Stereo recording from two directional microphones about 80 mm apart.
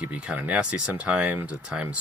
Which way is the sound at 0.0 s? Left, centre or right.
Centre.